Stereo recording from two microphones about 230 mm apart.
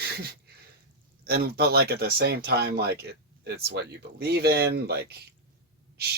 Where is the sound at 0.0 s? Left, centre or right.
Right.